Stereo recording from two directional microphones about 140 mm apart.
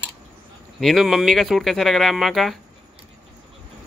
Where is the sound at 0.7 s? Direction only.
Centre (ahead or behind).